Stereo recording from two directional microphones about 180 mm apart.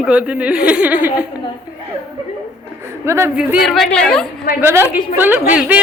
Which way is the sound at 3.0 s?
15° right (ahead or behind).